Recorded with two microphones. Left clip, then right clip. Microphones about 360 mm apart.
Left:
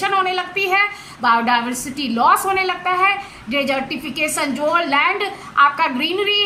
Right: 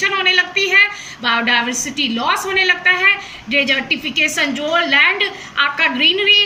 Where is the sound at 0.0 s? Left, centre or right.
Centre.